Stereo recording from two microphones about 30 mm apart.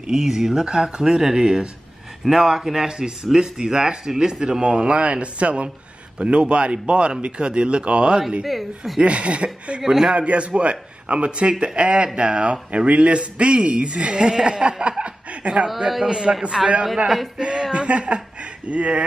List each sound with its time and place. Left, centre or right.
0.0 s speech: centre
0.7 s speech: right
4.8 s speech: right
8.5 s a woman's voice: centre
9.0 s speech: right
9.8 s speech: centre
10.1 s speech: right
14.3 s speech: right
14.6 s speech: right
16.0 s speech: right
16.6 s a woman's voice: centre
17.4 s a sound: right
17.7 s speech: right